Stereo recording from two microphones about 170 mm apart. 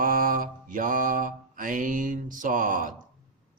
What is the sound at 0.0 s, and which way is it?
Mantra, 55° right (ahead or behind).